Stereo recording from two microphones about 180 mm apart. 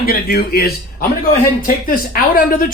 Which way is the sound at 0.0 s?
55° left (ahead or behind).